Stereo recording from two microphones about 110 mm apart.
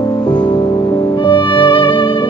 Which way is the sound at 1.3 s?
50° left (ahead or behind).